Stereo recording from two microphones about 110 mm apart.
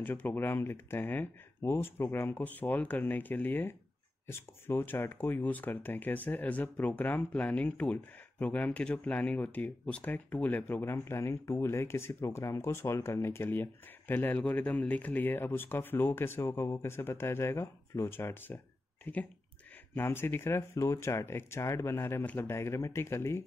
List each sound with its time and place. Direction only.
0.0 s speech: 15° left (ahead or behind)